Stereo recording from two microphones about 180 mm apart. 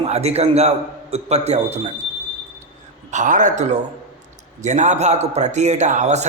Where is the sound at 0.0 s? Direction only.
35° right (ahead or behind).